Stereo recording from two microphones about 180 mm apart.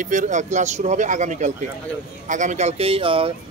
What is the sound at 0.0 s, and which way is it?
Speech, 45° right (ahead or behind).